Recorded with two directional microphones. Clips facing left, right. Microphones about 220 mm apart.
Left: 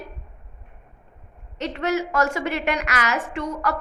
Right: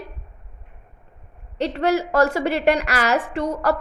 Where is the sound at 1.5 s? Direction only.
30° right (ahead or behind).